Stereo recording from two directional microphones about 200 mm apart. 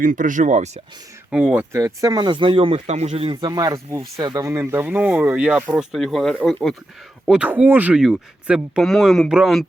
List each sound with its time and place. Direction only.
0.0 s speech: 40° right (ahead or behind)
1.3 s speech: 5° right (ahead or behind); by 3.3 s 30° right (ahead or behind)
3.4 s speech: 20° right (ahead or behind); by 9.6 s centre (ahead or behind)